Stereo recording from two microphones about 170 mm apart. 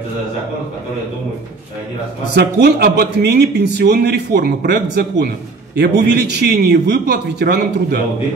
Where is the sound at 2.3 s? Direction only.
65° right (ahead or behind).